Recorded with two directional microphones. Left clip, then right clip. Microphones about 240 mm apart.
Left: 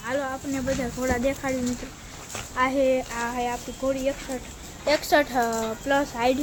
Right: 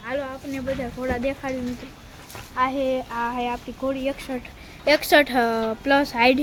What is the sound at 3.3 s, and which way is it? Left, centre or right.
Speech, right.